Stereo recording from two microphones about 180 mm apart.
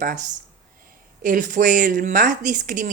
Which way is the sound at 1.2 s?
45° right (ahead or behind).